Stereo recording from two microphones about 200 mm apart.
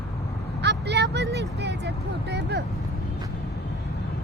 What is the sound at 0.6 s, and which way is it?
Speech, 60° right (ahead or behind).